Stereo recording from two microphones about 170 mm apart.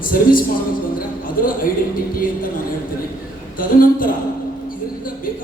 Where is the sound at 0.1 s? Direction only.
55° left (ahead or behind).